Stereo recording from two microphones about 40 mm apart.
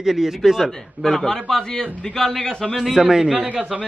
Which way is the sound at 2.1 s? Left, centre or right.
Centre.